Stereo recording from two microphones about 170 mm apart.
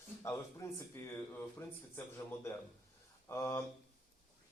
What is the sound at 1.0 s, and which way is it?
Speech, 15° left (ahead or behind).